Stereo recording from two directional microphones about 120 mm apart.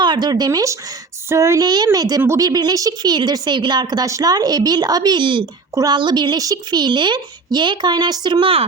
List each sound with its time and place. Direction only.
0.0 s a woman's voice: 35° right (ahead or behind)